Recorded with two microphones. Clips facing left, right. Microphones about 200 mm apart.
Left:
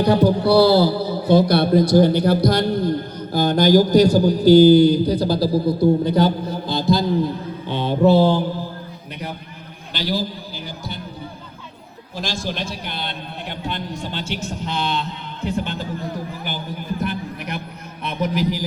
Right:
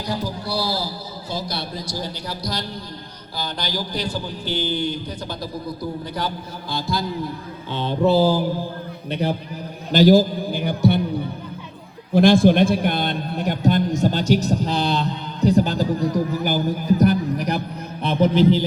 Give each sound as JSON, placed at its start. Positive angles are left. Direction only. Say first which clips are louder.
{"t": 0.0, "sound": "a man's voice", "louder": "left 12 dB", "side_deg": 60}
{"t": 7.7, "sound": "a sound", "louder": "left 3 dB", "side_deg": 10}
{"t": 8.0, "sound": "mantra", "louder": "left 2 dB", "side_deg": 0}
{"t": 9.2, "sound": "a man's voice", "louder": "right 8 dB", "side_deg": -30}
{"t": 9.9, "sound": "a man's voice", "louder": "right 11 dB", "side_deg": -45}
{"t": 12.1, "sound": "a man's voice", "louder": "right 14 dB", "side_deg": -55}